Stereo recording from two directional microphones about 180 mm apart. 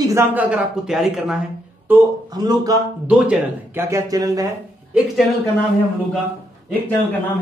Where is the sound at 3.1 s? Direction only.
10° right (ahead or behind).